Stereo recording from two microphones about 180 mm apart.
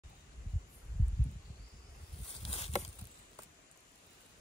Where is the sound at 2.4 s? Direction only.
35° left (ahead or behind).